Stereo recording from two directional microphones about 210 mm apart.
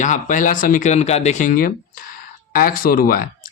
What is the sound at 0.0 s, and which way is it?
Speech, 35° left (ahead or behind).